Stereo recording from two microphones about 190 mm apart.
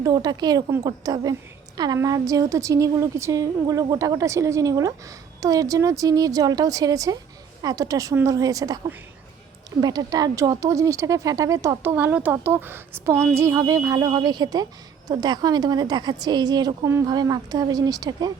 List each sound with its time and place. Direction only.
0.0 s a woman's voice: 20° right (ahead or behind)